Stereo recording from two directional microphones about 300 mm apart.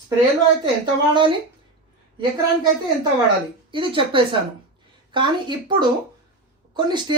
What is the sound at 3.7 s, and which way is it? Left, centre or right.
A woman's voice, centre.